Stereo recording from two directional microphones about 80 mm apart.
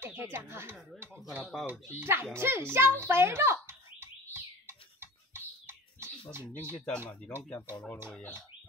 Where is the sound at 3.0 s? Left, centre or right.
Right.